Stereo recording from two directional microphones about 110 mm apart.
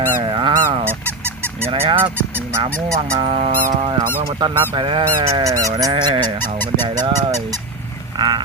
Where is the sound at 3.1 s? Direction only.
55° right (ahead or behind).